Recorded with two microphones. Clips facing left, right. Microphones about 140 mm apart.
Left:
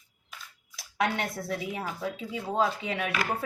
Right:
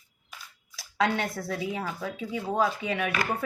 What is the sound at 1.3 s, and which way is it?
Speech, 25° left (ahead or behind).